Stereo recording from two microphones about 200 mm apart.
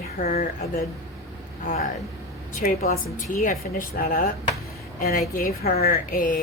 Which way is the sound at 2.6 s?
45° left (ahead or behind).